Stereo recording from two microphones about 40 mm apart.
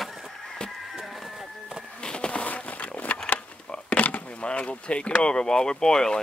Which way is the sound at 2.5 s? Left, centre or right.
Left.